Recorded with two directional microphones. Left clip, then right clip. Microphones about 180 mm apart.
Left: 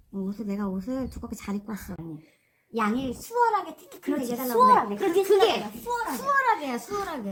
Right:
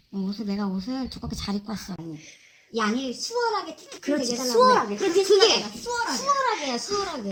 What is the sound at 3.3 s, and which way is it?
A child's voice, 5° right (ahead or behind).